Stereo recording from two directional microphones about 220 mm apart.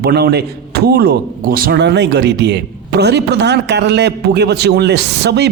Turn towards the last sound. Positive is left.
turn(degrees=-50)  # may be behind; listen again after turning